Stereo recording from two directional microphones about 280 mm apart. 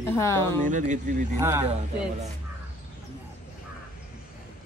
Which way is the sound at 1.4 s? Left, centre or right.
Centre.